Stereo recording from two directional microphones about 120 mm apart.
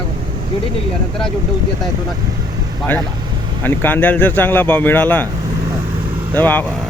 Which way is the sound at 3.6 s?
15° left (ahead or behind).